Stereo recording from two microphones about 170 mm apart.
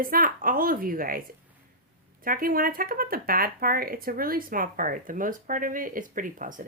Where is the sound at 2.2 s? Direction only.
55° right (ahead or behind).